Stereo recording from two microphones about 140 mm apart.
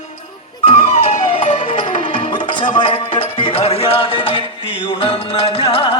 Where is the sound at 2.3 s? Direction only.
35° left (ahead or behind).